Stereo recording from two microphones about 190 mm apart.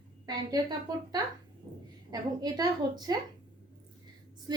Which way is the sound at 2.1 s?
20° right (ahead or behind).